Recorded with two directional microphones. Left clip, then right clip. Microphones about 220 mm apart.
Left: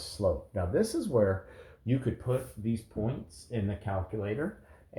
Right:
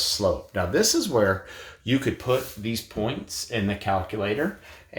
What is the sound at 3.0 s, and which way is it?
Speech, 45° right (ahead or behind).